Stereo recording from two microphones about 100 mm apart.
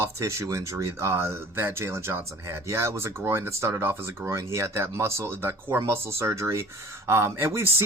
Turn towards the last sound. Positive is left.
turn(degrees=-25)  # may be behind; listen again after turning